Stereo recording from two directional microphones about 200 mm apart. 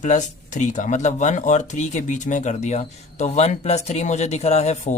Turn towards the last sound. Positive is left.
turn(degrees=35)  # may be behind; listen again after turning